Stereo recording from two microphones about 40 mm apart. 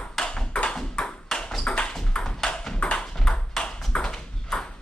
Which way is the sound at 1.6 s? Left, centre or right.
Left.